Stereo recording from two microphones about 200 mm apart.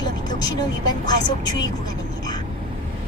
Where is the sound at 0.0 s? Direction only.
20° left (ahead or behind).